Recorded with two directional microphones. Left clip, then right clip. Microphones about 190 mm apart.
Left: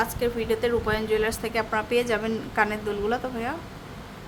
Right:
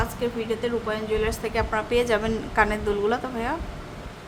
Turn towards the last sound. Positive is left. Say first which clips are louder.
# right 2 dB
turn(degrees=0)  # may be behind; listen again after turning